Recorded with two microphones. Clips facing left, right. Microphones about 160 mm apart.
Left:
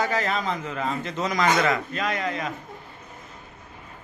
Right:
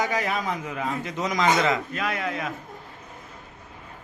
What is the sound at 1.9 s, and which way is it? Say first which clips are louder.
Speech: left 1 dB; 5° right (ahead or behind).